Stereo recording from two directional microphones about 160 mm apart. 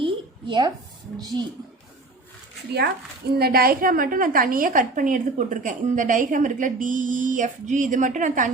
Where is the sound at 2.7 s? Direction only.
85° right.